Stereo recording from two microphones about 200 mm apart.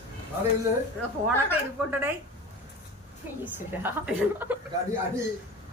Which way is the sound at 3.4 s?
10° right (ahead or behind).